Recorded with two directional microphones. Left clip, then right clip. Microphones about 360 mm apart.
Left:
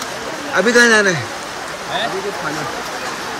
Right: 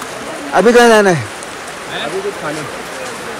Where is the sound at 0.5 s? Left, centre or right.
Centre.